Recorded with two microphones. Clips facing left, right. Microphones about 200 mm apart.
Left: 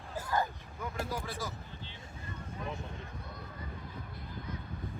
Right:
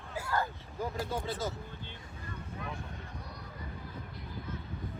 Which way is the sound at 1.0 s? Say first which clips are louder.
Right 3 dB; 25° right (ahead or behind).